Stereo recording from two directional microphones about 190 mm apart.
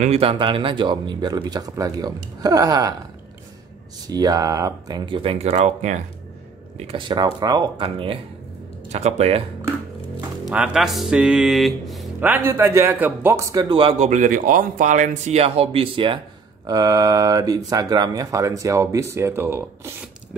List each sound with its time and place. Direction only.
0.0 s speech: 30° right (ahead or behind)
4.1 s speech: 20° right (ahead or behind); by 6.0 s 40° right (ahead or behind)
6.9 s speech: 25° right (ahead or behind)
10.4 s speech: 5° right (ahead or behind)